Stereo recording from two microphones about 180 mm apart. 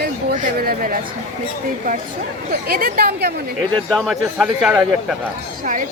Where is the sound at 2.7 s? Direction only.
55° right (ahead or behind).